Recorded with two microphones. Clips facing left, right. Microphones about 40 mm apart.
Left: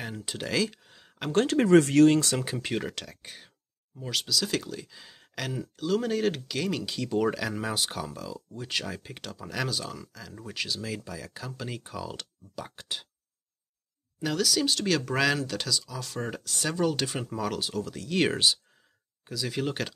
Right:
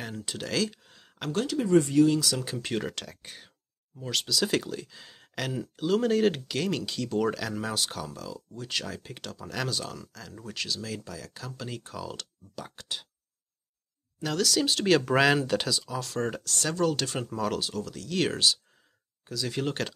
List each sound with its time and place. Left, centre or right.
0.0 s speech: centre
1.3 s speech: left
1.6 s speech: left
2.0 s speech: left
2.3 s speech: centre
2.6 s speech: centre
14.2 s speech: centre
16.0 s speech: centre